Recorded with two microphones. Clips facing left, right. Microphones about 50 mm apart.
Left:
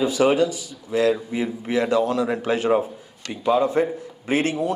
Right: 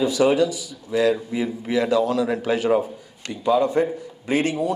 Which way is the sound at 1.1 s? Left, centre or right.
Centre.